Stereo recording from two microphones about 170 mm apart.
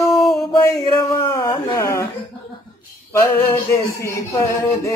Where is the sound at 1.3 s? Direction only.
20° left (ahead or behind).